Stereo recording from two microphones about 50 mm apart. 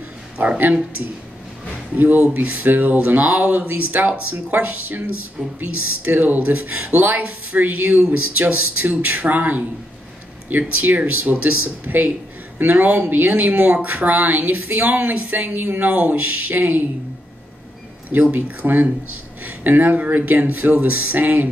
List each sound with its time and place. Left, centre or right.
2.0 s speech: right
10.8 s speech: right
18.3 s speech: right